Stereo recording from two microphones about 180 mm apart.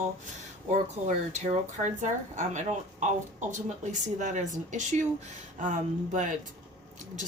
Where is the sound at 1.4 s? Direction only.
40° right (ahead or behind).